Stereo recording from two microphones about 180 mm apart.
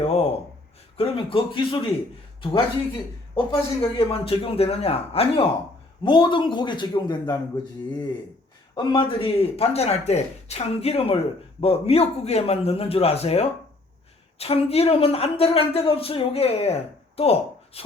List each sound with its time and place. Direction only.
0.0 s a sound: 35° left (ahead or behind)
0.9 s a man's voice: 30° left (ahead or behind)
3.3 s a man's voice: 30° left (ahead or behind)